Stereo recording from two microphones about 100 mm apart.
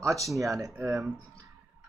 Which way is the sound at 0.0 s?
35° right (ahead or behind).